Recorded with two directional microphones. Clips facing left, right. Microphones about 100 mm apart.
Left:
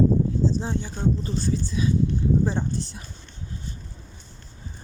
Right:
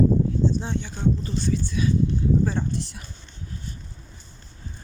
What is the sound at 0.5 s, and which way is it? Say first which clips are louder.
Speech: left 1 dB; 35° left (ahead or behind).